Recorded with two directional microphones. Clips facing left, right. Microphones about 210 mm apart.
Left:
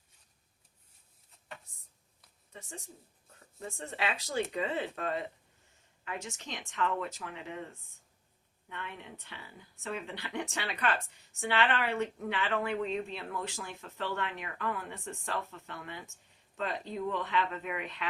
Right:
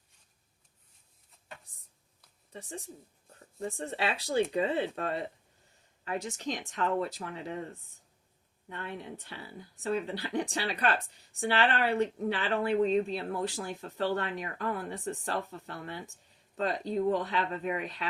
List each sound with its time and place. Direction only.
2.5 s speech: 35° right (ahead or behind)